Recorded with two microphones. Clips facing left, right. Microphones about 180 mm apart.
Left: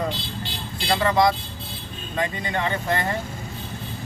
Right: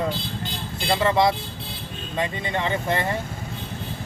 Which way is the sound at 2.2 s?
25° right (ahead or behind).